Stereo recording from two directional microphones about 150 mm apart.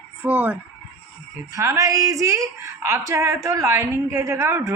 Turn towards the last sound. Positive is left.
turn(degrees=-15)  # may be behind; listen again after turning